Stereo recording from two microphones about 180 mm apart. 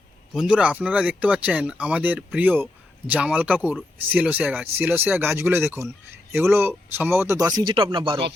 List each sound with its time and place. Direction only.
0.3 s speech: 5° right (ahead or behind); by 8.2 s 25° right (ahead or behind)